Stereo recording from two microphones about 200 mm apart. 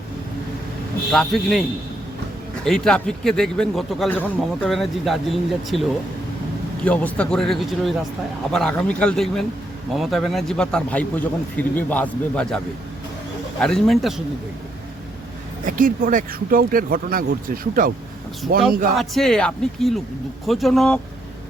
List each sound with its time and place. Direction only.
1.1 s a man's voice: centre (ahead or behind)
2.6 s a man's voice: 5° left (ahead or behind)
6.8 s a man's voice: 5° left (ahead or behind)
13.6 s a man's voice: centre (ahead or behind)
15.6 s speech: 45° right (ahead or behind)
18.9 s a man's voice: centre (ahead or behind)